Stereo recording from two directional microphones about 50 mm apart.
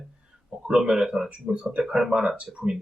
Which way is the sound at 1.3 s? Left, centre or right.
Right.